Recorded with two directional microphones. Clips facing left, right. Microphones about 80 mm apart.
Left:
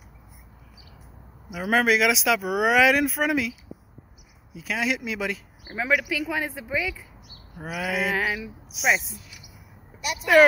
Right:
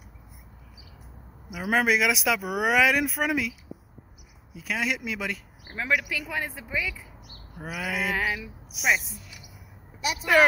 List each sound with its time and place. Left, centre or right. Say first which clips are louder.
1.5 s speech: left 2 dB; centre
4.6 s speech: left 2 dB; centre
7.6 s speech: left 3 dB; centre